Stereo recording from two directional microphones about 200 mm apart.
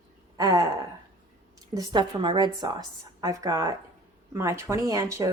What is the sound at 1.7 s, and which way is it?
A woman's voice, 25° right (ahead or behind).